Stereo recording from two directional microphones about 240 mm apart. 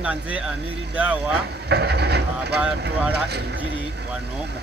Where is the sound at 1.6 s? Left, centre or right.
Right.